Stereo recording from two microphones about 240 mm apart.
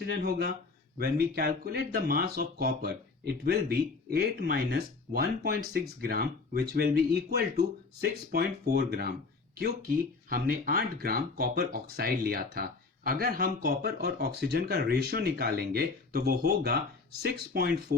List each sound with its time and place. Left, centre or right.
0.0 s speech: right